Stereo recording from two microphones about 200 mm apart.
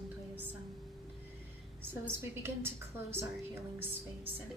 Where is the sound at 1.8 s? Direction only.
10° right (ahead or behind).